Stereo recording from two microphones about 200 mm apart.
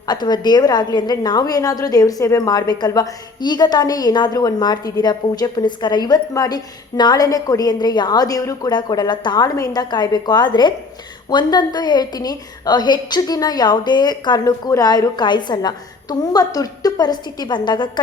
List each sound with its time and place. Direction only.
0.1 s a woman's voice: 20° left (ahead or behind)